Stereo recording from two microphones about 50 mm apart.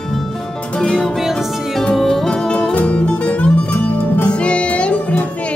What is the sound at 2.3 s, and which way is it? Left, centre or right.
Music, centre.